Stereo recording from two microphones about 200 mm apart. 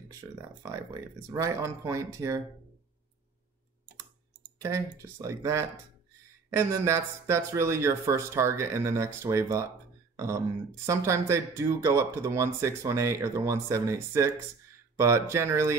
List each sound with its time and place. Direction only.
0.6 s speech: 15° right (ahead or behind)
4.6 s speech: 15° right (ahead or behind)